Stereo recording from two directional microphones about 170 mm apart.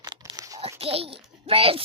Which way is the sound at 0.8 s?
35° right (ahead or behind).